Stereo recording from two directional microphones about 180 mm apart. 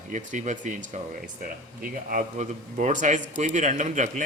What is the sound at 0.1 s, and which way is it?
Speech, 45° right (ahead or behind).